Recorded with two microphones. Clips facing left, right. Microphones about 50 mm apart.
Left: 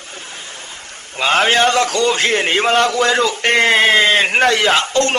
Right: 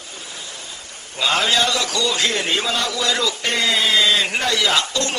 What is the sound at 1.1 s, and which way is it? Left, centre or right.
A man's voice, left.